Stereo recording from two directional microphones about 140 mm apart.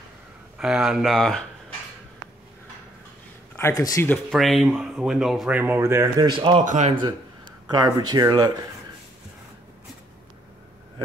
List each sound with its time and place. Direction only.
0.6 s speech: 5° right (ahead or behind)
3.5 s speech: 20° left (ahead or behind)
4.3 s speech: centre (ahead or behind)
5.6 s speech: 15° right (ahead or behind)
6.2 s speech: 35° right (ahead or behind)
6.6 s speech: 60° right (ahead or behind)
7.7 s speech: 30° right (ahead or behind)